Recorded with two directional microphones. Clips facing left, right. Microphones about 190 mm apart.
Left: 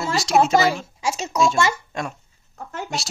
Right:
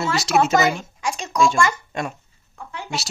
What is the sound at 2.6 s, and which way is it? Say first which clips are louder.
Speech: left 3 dB; 45° left (ahead or behind).